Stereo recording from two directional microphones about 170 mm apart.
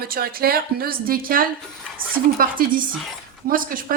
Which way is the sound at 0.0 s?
60° right (ahead or behind).